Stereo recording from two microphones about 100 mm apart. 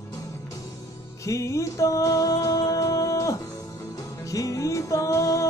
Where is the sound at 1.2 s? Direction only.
30° left (ahead or behind).